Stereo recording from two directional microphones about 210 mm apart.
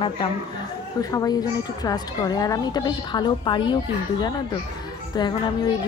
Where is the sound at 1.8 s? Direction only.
20° left (ahead or behind).